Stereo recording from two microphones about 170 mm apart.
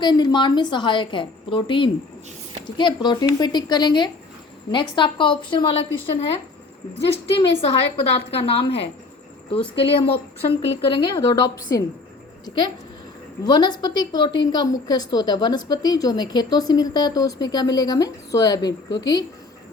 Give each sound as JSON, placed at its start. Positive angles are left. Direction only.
{"t": 0.0, "sound": "a woman's voice", "side_deg": 25}
{"t": 13.4, "sound": "a woman's voice", "side_deg": 25}